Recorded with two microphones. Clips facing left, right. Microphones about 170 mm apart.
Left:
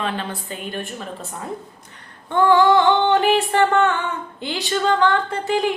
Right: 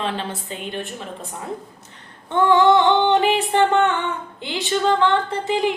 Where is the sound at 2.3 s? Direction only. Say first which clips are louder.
Even; 20° right (ahead or behind).